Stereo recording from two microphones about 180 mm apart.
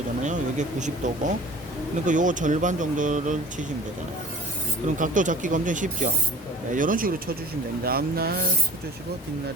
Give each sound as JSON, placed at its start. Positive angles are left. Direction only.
{"t": 0.2, "sound": "speech", "side_deg": -40}
{"t": 4.9, "sound": "speech", "side_deg": -45}